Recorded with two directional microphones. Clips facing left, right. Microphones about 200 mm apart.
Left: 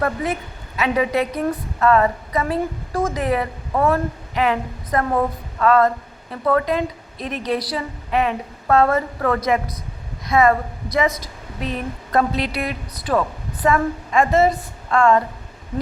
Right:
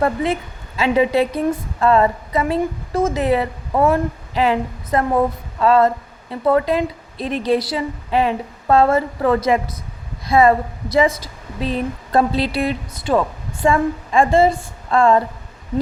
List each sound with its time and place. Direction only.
0.0 s a woman's voice: 25° right (ahead or behind)